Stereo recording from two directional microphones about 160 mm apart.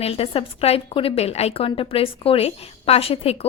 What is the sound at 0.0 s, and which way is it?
A woman's voice, 35° left (ahead or behind).